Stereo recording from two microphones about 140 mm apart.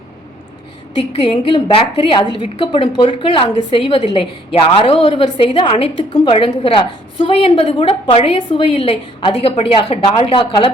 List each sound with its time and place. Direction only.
0.9 s a woman's voice: 40° left (ahead or behind)